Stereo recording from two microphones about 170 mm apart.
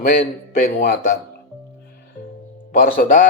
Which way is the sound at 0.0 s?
55° left (ahead or behind).